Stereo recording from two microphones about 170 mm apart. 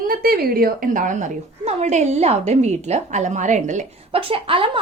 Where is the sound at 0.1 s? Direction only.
60° right (ahead or behind).